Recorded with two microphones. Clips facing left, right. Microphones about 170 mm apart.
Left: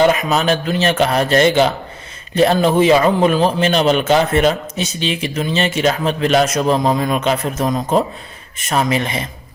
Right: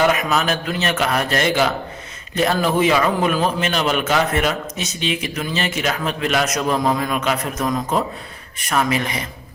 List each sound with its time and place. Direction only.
0.0 s a man's voice: 30° left (ahead or behind)